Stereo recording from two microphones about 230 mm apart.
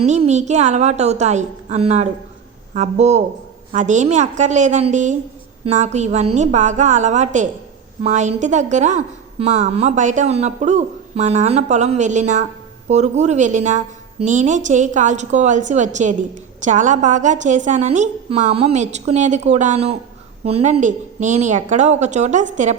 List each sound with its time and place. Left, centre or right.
0.0 s a woman's voice: right